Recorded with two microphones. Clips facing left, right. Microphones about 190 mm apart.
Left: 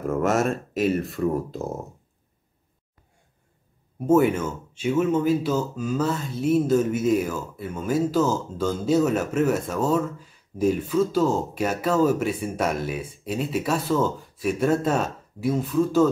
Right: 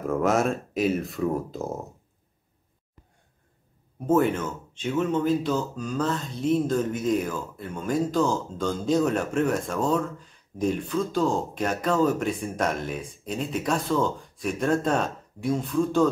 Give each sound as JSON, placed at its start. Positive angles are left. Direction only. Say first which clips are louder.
{"t": 0.1, "sound": "speech", "louder": "even", "side_deg": 0}
{"t": 4.0, "sound": "speech", "louder": "left 3 dB", "side_deg": 10}